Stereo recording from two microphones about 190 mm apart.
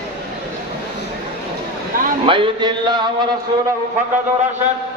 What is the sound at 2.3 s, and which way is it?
Music, 25° right (ahead or behind).